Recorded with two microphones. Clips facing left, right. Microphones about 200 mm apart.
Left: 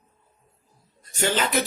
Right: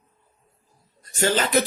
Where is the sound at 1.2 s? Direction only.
40° right (ahead or behind).